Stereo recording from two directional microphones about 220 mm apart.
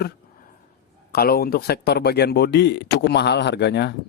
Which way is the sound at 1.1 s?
45° left (ahead or behind).